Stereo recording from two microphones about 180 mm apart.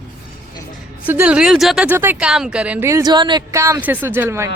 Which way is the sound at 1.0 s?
10° right (ahead or behind).